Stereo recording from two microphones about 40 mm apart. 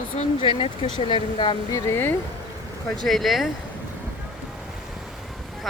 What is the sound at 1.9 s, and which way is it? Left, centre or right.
Speech, left.